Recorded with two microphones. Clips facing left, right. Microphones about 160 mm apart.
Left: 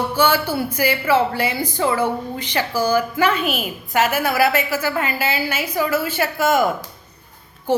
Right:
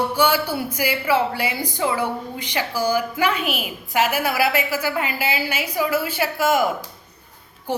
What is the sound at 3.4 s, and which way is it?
Speech, 45° left (ahead or behind).